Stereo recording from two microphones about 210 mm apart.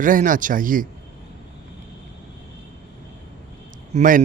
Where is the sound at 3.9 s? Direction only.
40° right (ahead or behind).